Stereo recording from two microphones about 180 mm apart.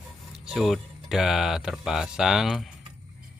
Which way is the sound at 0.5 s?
Centre (ahead or behind).